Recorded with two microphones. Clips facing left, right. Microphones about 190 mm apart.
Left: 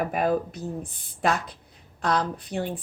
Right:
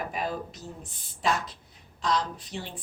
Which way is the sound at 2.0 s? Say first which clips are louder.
Left 3 dB; 55° left (ahead or behind).